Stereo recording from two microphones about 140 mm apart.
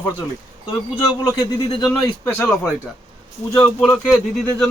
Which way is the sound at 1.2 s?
30° left (ahead or behind).